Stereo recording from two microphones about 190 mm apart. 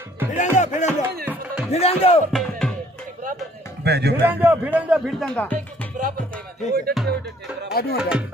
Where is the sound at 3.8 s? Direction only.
60° right (ahead or behind).